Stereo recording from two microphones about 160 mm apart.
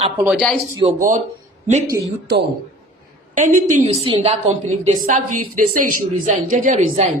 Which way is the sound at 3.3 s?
55° right (ahead or behind).